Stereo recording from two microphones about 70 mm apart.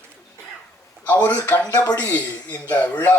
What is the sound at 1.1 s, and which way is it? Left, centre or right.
Speech, left.